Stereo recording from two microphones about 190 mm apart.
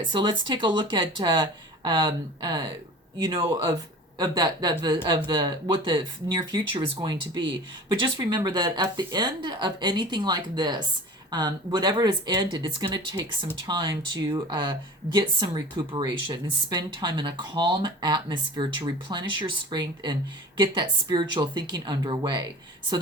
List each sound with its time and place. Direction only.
0.1 s speech: 25° right (ahead or behind)